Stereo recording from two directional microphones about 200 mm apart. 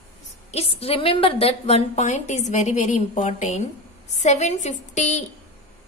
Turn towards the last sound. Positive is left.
turn(degrees=35)  # may be behind; listen again after turning